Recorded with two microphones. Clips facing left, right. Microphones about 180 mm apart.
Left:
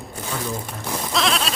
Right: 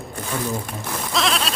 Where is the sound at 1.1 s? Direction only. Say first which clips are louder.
Even; centre (ahead or behind).